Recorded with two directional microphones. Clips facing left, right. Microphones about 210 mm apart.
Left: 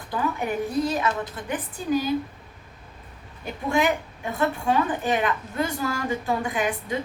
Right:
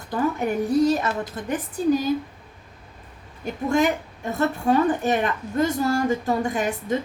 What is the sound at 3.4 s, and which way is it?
A woman's voice, 45° right (ahead or behind).